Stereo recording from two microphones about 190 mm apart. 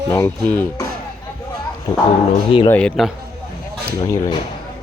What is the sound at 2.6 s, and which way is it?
Speech, 5° left (ahead or behind).